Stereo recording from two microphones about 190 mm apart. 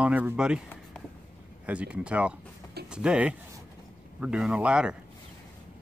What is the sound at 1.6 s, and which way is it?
Speech, 5° right (ahead or behind).